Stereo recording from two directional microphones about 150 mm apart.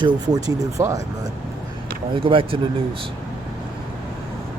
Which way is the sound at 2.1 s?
35° right (ahead or behind).